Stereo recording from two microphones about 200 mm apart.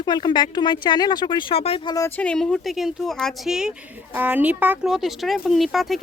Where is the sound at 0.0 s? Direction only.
20° left (ahead or behind).